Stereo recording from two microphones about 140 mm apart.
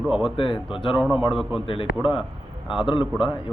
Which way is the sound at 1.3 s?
Centre (ahead or behind).